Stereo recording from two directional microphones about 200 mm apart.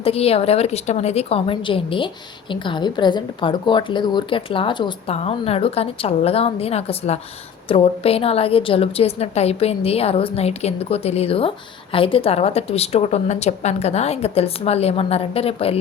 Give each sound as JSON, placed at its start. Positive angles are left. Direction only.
{"t": 0.0, "sound": "a woman's voice", "side_deg": 30}